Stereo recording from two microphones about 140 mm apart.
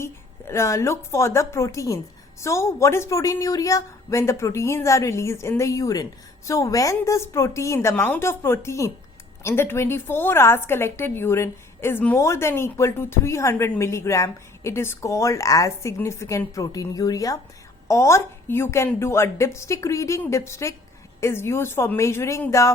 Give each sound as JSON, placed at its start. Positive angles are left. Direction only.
{"t": 0.0, "sound": "a woman's voice", "side_deg": 20}